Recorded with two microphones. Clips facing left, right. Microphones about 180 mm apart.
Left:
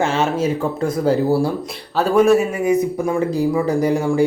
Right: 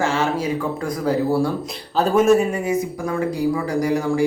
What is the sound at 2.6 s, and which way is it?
Speech, 25° left (ahead or behind).